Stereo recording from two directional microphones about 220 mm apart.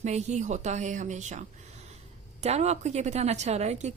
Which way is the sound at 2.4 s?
30° right (ahead or behind).